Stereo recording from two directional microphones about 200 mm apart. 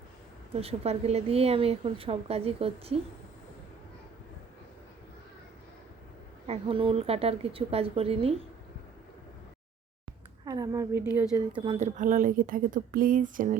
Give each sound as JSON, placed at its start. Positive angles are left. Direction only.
{"t": 0.5, "sound": "a woman's voice", "side_deg": -30}
{"t": 6.5, "sound": "a woman's voice", "side_deg": -25}
{"t": 10.4, "sound": "a woman's voice", "side_deg": -15}
{"t": 11.3, "sound": "a woman's voice", "side_deg": -25}
{"t": 11.8, "sound": "speech", "side_deg": -40}